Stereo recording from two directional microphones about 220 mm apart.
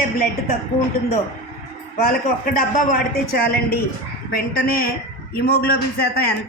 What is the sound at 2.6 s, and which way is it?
A man's voice, 40° left (ahead or behind).